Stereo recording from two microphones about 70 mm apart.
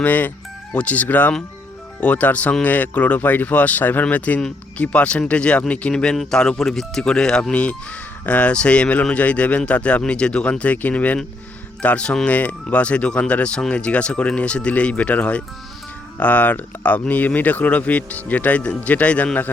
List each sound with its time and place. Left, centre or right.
0.0 s speech: left